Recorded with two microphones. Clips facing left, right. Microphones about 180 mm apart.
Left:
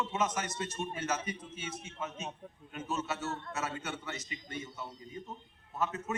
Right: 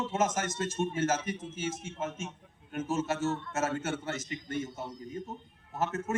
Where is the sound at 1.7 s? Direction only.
45° right (ahead or behind).